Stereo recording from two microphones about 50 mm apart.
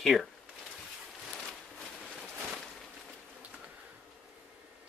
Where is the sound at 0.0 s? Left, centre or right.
Centre.